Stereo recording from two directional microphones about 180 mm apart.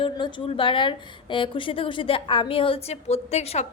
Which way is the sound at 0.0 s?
25° left (ahead or behind).